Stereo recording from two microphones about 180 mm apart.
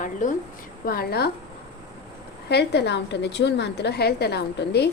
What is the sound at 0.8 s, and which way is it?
Speech, 55° left (ahead or behind).